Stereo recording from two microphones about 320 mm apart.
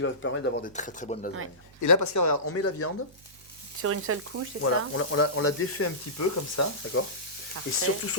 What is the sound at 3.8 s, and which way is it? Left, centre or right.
Sizzle, right.